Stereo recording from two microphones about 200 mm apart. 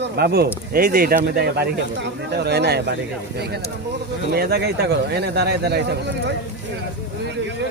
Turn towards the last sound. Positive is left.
turn(degrees=-60)  # may be behind; listen again after turning